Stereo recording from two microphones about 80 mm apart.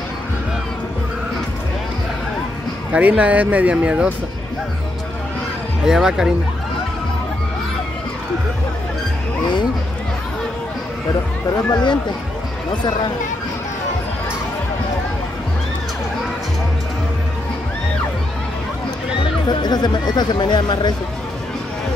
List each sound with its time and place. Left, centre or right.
2.9 s speech: centre
5.9 s speech: centre
11.7 s speech: left
19.6 s speech: left